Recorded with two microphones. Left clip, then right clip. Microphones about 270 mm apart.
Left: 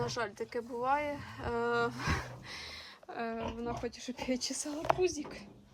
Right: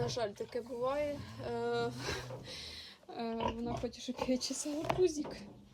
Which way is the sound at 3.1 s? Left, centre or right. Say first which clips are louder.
Left 2 dB; centre.